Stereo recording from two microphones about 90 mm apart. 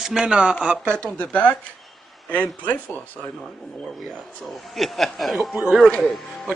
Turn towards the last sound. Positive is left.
turn(degrees=0)  # may be behind; listen again after turning